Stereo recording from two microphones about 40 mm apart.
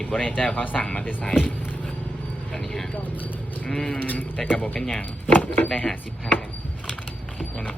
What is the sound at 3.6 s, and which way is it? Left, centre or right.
Speech, centre.